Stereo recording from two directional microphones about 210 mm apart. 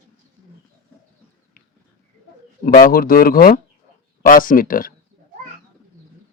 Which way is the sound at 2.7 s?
45° left (ahead or behind).